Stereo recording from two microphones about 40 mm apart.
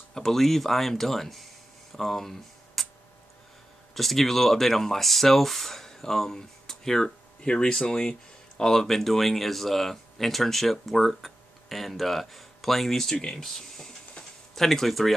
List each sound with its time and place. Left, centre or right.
0.1 s speech: centre
2.0 s a sound: centre
3.9 s speech: centre
13.1 s speech: left
13.4 s speech: centre